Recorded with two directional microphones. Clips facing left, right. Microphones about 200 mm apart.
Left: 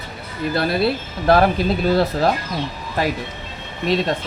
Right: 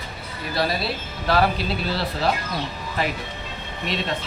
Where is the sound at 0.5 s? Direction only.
55° left (ahead or behind).